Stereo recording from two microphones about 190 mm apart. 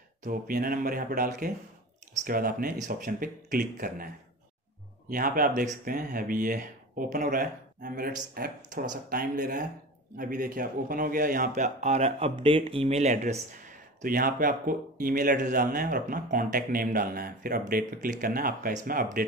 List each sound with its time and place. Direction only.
0.2 s speech: 50° right (ahead or behind)
5.1 s speech: 50° right (ahead or behind)